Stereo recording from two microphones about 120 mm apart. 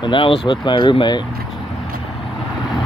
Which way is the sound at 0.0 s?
45° left (ahead or behind).